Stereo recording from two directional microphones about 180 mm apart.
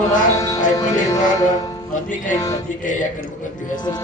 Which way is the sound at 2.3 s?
20° left (ahead or behind).